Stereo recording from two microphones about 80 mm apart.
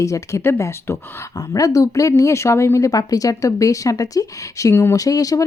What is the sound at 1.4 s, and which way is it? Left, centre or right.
Speech, left.